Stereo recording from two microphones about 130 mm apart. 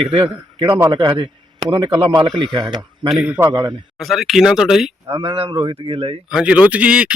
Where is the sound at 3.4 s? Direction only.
30° right (ahead or behind).